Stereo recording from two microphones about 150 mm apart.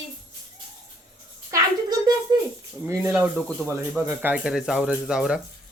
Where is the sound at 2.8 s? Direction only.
10° right (ahead or behind).